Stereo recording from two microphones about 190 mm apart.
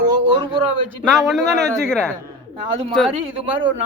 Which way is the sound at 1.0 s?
Centre (ahead or behind).